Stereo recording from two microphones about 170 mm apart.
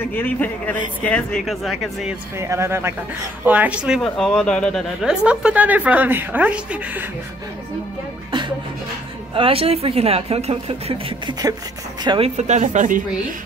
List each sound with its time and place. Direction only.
0.0 s a man's voice: 10° left (ahead or behind)
2.3 s a woman's voice: 15° right (ahead or behind)
9.3 s a woman's voice: 35° right (ahead or behind)
12.4 s speech: 40° right (ahead or behind)